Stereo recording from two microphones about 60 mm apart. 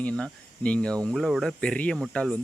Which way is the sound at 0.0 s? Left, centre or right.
Centre.